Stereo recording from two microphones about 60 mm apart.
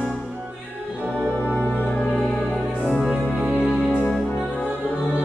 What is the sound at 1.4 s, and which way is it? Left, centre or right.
Music, left.